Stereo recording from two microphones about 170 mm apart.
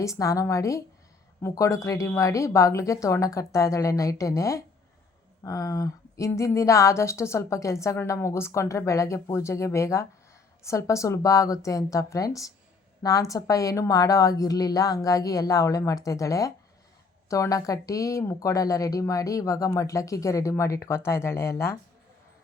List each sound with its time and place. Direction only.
0.0 s speech: 20° left (ahead or behind)